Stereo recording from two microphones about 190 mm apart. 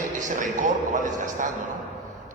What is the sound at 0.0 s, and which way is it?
A man's voice, 40° right (ahead or behind).